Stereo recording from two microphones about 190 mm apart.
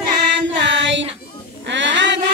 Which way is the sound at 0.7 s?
70° right (ahead or behind).